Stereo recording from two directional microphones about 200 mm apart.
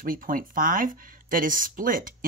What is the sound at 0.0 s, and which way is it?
Speech, 45° right (ahead or behind).